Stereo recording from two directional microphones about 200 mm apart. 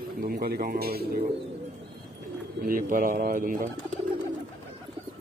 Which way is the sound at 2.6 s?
45° right (ahead or behind).